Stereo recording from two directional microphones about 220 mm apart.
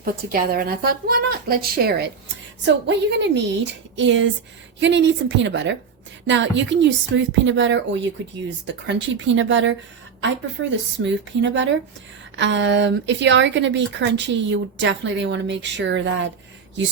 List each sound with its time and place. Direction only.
0.0 s a woman's voice: 40° right (ahead or behind); by 16.3 s 60° right (ahead or behind)